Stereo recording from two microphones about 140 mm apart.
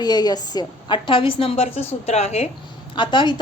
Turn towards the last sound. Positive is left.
turn(degrees=35)  # may be behind; listen again after turning